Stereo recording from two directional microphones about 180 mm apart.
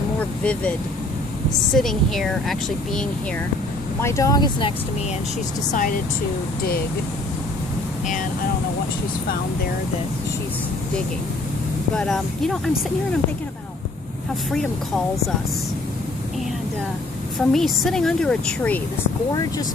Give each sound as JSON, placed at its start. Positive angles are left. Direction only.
{"t": 0.2, "sound": "vehicle", "side_deg": 5}
{"t": 1.7, "sound": "speech", "side_deg": 0}
{"t": 4.0, "sound": "speech", "side_deg": 15}
{"t": 5.7, "sound": "speech", "side_deg": 50}
{"t": 11.9, "sound": "speech", "side_deg": 5}
{"t": 14.5, "sound": "speech", "side_deg": 5}
{"t": 17.5, "sound": "speech", "side_deg": 0}
{"t": 19.3, "sound": "speech", "side_deg": 20}